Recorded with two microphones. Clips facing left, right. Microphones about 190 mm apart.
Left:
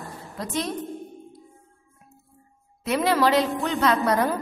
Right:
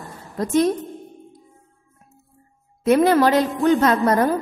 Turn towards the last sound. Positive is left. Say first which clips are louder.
# right 4 dB
turn(degrees=-45)  # may be behind; listen again after turning